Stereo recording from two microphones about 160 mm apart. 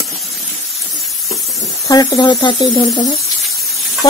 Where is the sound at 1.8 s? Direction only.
20° left (ahead or behind).